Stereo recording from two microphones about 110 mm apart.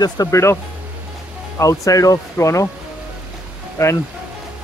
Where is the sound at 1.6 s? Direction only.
30° left (ahead or behind).